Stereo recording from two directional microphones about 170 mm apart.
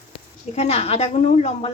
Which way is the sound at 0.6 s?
35° left (ahead or behind).